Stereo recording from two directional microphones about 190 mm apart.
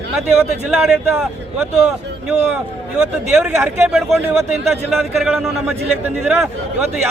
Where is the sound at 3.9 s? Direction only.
Centre (ahead or behind).